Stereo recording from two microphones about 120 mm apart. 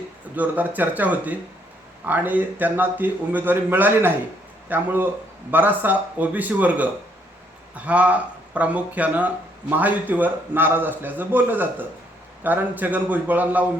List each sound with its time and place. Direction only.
0.3 s speech: 15° right (ahead or behind)